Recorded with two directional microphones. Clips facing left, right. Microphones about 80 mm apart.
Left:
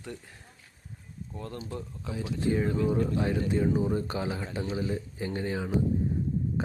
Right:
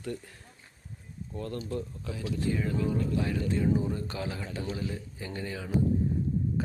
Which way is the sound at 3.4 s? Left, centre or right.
Left.